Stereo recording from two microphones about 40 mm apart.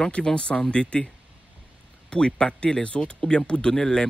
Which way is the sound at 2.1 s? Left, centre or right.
Left.